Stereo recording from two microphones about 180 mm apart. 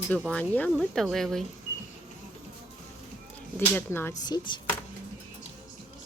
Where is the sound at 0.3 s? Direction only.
5° left (ahead or behind).